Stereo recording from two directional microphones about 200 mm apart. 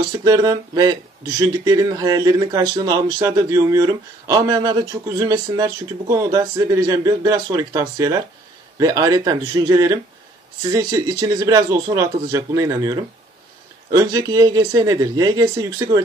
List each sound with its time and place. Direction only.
0.1 s speech: 20° right (ahead or behind)